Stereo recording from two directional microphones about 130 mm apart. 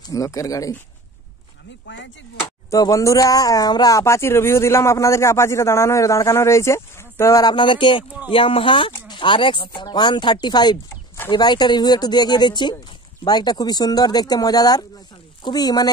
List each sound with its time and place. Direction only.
0.0 s speech: 25° left (ahead or behind)
2.7 s speech: 25° left (ahead or behind)
7.5 s speech: 40° left (ahead or behind)